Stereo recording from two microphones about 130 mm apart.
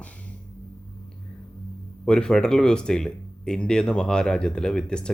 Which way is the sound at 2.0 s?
5° left (ahead or behind).